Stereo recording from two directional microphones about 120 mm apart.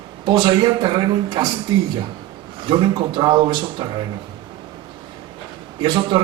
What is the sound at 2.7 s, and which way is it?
A man's voice, 40° right (ahead or behind).